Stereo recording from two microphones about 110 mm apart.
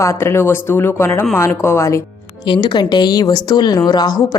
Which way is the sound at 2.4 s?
40° left (ahead or behind).